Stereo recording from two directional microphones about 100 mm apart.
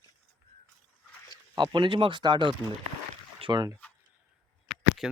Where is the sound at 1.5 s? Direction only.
50° right (ahead or behind).